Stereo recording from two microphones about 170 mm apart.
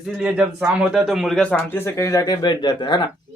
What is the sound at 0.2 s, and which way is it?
A man's voice, 5° right (ahead or behind).